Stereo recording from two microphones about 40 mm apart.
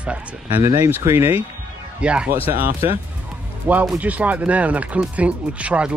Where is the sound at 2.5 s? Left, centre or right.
Right.